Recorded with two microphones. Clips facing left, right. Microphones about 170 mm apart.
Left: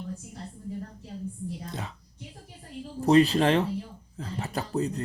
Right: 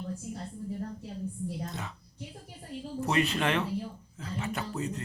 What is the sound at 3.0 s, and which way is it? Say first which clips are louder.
Speech: left 9 dB; 35° left (ahead or behind).